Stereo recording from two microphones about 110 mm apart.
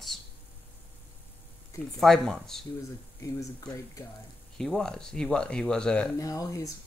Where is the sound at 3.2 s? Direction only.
30° left (ahead or behind).